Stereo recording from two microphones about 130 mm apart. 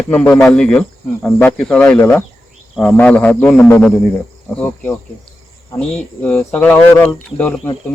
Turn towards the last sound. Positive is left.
turn(degrees=10)  # may be behind; listen again after turning